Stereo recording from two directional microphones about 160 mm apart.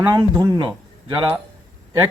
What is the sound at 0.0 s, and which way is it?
Speech, 25° right (ahead or behind).